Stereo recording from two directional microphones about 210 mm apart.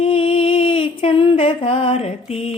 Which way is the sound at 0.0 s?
25° left (ahead or behind).